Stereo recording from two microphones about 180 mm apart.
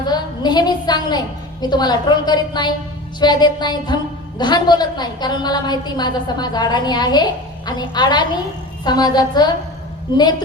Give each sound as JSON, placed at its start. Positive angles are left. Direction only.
{"t": 0.0, "sound": "a woman's voice", "side_deg": 25}